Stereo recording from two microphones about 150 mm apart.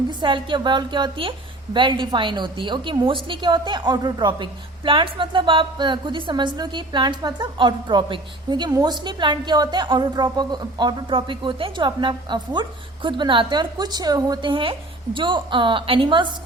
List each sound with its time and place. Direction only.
0.1 s a woman's voice: 30° right (ahead or behind)